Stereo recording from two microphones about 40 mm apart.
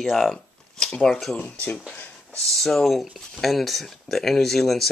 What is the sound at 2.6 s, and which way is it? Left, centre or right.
Speech, centre.